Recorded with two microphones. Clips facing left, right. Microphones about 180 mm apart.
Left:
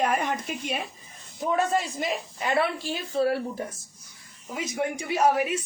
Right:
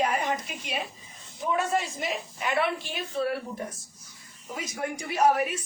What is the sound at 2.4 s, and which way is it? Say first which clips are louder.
Speech: left 2 dB; 35° left (ahead or behind).